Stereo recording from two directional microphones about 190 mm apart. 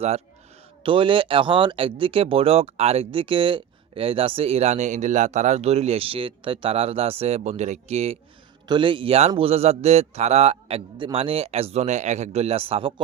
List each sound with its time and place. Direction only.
0.8 s a man's voice: 25° right (ahead or behind)